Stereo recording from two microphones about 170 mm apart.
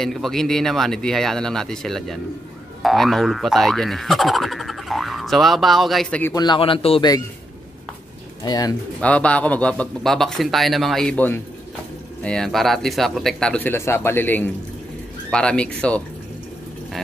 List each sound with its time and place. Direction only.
0.0 s speech: centre (ahead or behind)
6.3 s a man's voice: 25° left (ahead or behind)
8.5 s a man's voice: 20° left (ahead or behind)
9.0 s speech: 5° left (ahead or behind)